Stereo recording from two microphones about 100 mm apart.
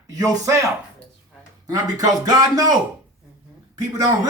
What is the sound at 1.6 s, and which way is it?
A man's voice, 35° right (ahead or behind).